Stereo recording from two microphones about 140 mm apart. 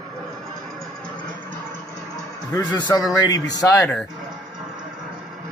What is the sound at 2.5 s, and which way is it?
A man's voice, 25° left (ahead or behind).